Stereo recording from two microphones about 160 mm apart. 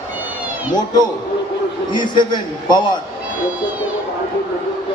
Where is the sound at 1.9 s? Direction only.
30° left (ahead or behind).